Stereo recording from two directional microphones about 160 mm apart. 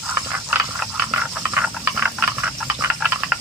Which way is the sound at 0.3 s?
10° right (ahead or behind).